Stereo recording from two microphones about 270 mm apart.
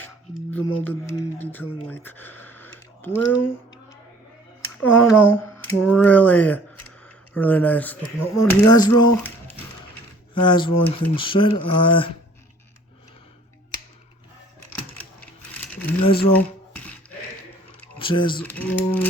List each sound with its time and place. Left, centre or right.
0.5 s speech: centre
1.9 s a sound: centre
3.2 s speech: left
4.8 s speech: centre
6.0 s mechanisms: centre
7.3 s speech: centre
15.6 s a sound: centre
18.0 s speech: centre
18.4 s mechanisms: centre